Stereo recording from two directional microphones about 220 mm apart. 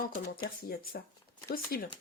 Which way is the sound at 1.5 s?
40° left (ahead or behind).